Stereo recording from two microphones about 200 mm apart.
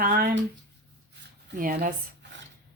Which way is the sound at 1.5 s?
45° right (ahead or behind).